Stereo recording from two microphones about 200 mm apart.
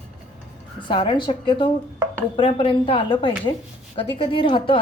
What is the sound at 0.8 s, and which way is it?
A woman's voice, 25° left (ahead or behind).